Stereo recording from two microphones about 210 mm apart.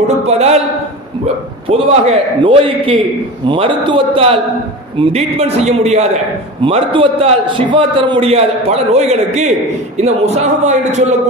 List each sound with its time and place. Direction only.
0.3 s a man's voice: 30° right (ahead or behind)
1.7 s a man's voice: 25° right (ahead or behind)